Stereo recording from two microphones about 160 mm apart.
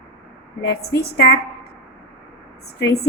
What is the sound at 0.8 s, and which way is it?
Speech, 80° left.